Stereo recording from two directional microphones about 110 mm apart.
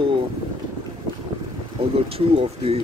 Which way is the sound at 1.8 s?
65° right (ahead or behind).